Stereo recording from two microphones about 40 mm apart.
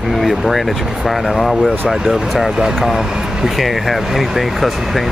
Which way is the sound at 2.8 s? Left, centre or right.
Centre.